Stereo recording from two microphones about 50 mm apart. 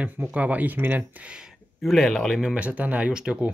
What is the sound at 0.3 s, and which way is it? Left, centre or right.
Speech, right.